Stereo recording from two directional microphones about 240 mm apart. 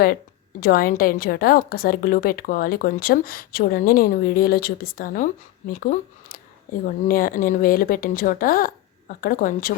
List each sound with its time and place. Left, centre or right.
0.6 s a woman's voice: left